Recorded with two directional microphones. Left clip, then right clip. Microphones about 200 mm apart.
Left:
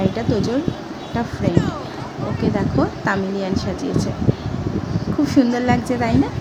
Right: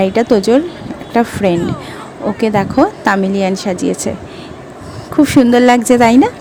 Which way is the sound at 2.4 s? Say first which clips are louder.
Right 9 dB; 45° right (ahead or behind).